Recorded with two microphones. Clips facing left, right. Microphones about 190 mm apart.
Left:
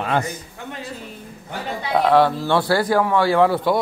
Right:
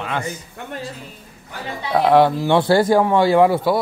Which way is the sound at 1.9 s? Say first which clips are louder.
Right 2 dB; 10° right (ahead or behind).